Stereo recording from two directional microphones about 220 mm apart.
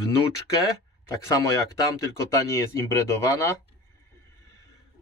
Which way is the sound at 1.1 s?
15° left (ahead or behind).